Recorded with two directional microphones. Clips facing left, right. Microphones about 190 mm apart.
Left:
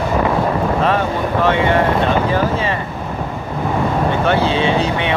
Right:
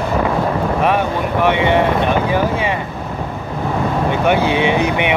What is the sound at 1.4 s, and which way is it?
Speech, 15° right (ahead or behind).